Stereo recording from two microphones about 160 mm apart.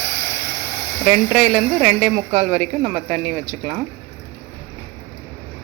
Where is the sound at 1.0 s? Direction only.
5° right (ahead or behind).